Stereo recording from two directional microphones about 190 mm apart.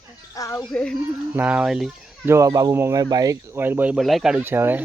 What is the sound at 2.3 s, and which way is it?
Speech, 15° right (ahead or behind).